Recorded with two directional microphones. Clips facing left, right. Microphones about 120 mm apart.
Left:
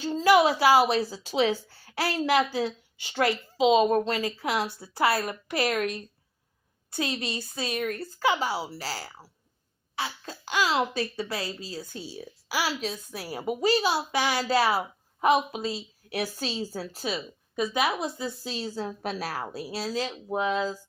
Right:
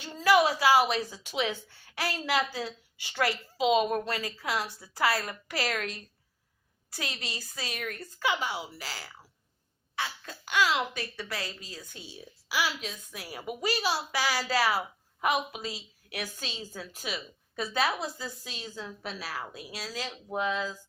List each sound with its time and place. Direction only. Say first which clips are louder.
0.0 s a woman's voice: left 3 dB; 25° left (ahead or behind)
17.5 s a woman's voice: left 3 dB; 15° left (ahead or behind)